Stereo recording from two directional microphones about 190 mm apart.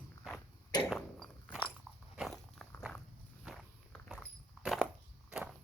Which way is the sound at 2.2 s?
Centre (ahead or behind).